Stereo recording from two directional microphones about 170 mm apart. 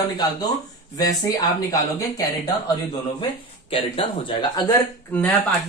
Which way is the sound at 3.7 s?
35° left (ahead or behind).